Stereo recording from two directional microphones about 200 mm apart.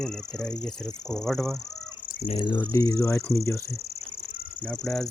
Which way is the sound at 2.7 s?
20° left (ahead or behind).